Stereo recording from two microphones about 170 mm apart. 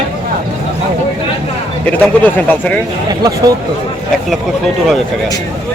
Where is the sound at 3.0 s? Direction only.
25° right (ahead or behind).